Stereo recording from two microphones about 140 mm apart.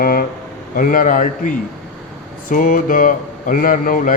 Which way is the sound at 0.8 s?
80° left.